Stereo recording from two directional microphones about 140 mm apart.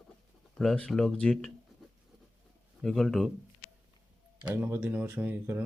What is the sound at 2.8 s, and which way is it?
Speech, centre (ahead or behind).